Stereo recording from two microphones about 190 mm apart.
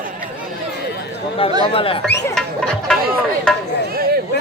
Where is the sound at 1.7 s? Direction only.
30° left (ahead or behind).